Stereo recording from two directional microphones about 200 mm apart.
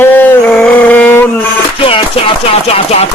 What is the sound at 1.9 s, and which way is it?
Speech, 30° left (ahead or behind).